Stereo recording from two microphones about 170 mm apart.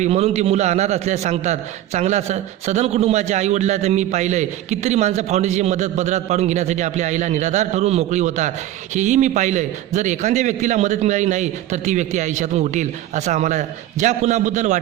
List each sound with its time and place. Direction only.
0.0 s a man's voice: 40° right (ahead or behind)